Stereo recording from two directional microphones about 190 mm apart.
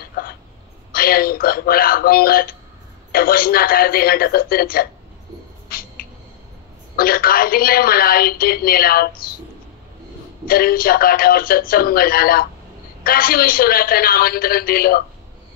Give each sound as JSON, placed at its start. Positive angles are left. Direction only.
{"t": 0.9, "sound": "a woman's voice", "side_deg": 50}
{"t": 5.7, "sound": "a sound", "side_deg": 50}
{"t": 7.0, "sound": "a woman's voice", "side_deg": 50}
{"t": 10.4, "sound": "a woman's voice", "side_deg": 50}